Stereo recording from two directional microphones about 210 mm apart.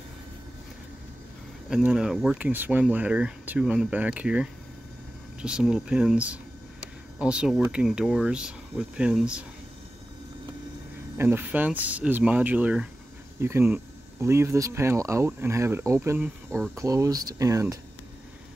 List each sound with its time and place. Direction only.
1.7 s speech: 5° right (ahead or behind)
11.1 s speech: 10° right (ahead or behind)